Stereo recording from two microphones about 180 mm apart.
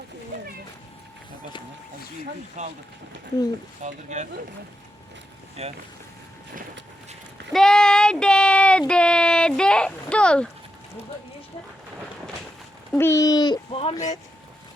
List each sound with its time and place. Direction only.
2.6 s speech: 45° right (ahead or behind)
3.8 s speech: 40° right (ahead or behind)
5.6 s speech: 35° right (ahead or behind)
7.5 s a sound: 5° left (ahead or behind)
8.9 s speech: 5° left (ahead or behind)
12.9 s speech: 15° left (ahead or behind)